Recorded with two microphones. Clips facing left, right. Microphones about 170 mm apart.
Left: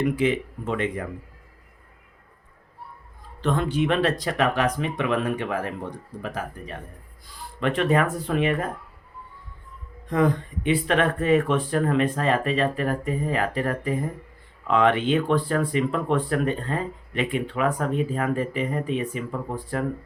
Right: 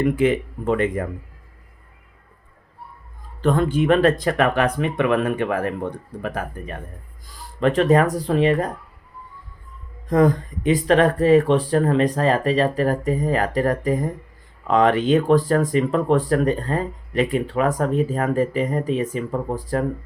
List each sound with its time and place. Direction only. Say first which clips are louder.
0.0 s speech: right 4 dB; 50° right (ahead or behind)
3.4 s speech: right 5 dB; 45° right (ahead or behind)
7.3 s speech: right 6 dB; 40° right (ahead or behind)
10.1 s speech: right 5 dB; 40° right (ahead or behind)